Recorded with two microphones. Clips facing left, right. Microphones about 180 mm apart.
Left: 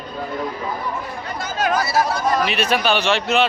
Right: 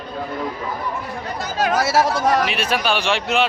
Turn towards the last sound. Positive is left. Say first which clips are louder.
# left 1 dB
turn(degrees=-15)  # may be behind; listen again after turning